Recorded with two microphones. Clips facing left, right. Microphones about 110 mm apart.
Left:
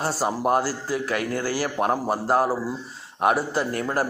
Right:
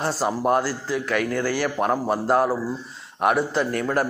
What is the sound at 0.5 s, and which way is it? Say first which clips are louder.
A man's voice: right 1 dB; 40° left (ahead or behind).